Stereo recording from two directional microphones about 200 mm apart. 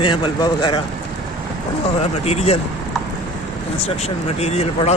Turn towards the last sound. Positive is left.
turn(degrees=30)  # may be behind; listen again after turning